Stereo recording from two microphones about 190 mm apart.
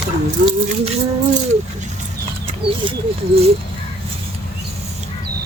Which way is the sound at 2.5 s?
30° right (ahead or behind).